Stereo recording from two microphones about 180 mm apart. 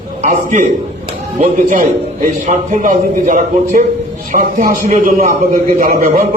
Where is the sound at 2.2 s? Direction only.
45° right (ahead or behind).